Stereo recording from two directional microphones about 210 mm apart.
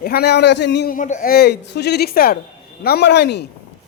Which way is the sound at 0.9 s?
40° left (ahead or behind).